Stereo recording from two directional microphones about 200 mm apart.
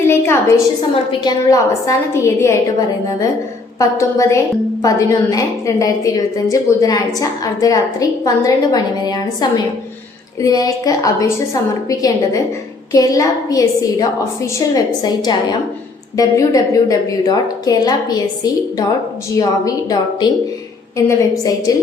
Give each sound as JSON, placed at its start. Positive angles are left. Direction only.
{"t": 0.0, "sound": "a sound", "side_deg": 10}
{"t": 1.2, "sound": "a woman's voice", "side_deg": 15}
{"t": 3.8, "sound": "a woman's voice", "side_deg": 15}